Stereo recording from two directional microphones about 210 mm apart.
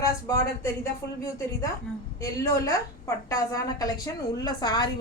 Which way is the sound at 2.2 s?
15° left (ahead or behind).